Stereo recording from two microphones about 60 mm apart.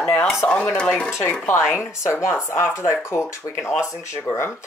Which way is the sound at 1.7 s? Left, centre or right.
Left.